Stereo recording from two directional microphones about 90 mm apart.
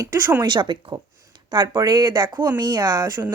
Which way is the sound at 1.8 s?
50° right (ahead or behind).